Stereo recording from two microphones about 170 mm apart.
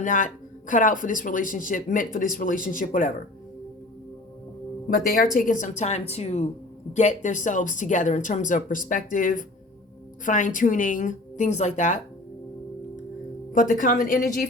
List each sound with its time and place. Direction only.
0.0 s speech: 50° left (ahead or behind)
4.9 s speech: 55° left (ahead or behind)
13.5 s speech: 50° left (ahead or behind)